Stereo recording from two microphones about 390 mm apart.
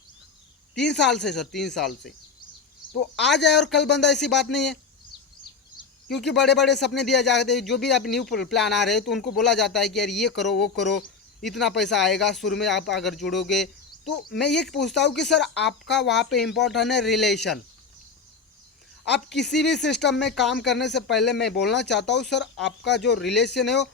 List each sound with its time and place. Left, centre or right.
0.7 s speech: left
1.1 s speech: centre
3.2 s speech: centre
3.8 s speech: left
4.1 s speech: centre
6.1 s speech: centre
15.5 s speech: left
16.0 s speech: centre
19.3 s speech: centre
19.6 s speech: left
20.1 s speech: centre
21.8 s speech: left
23.1 s speech: centre
23.6 s speech: left